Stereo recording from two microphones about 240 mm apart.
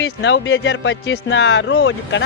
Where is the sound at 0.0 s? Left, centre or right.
Left.